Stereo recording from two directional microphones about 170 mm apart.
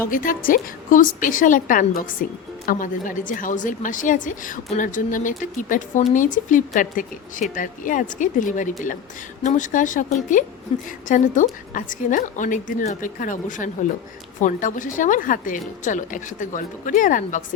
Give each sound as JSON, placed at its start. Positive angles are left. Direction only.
{"t": 0.1, "sound": "a woman's voice", "side_deg": 55}
{"t": 10.7, "sound": "a woman's voice", "side_deg": 35}
{"t": 11.1, "sound": "a woman's voice", "side_deg": 50}